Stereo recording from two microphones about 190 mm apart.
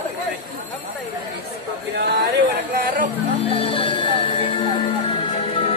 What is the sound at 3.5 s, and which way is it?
Music, 30° left (ahead or behind).